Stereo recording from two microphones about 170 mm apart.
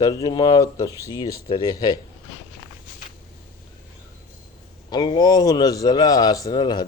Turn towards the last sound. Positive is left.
turn(degrees=25)  # may be behind; listen again after turning